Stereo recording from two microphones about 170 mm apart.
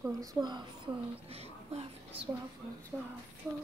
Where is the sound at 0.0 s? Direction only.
20° right (ahead or behind).